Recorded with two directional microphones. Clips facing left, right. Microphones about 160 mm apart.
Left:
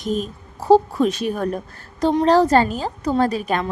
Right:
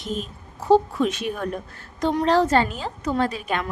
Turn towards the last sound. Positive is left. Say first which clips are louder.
# left 4 dB
turn(degrees=40)  # may be behind; listen again after turning